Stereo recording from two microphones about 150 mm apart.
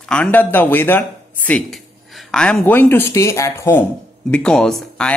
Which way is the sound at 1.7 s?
Centre (ahead or behind).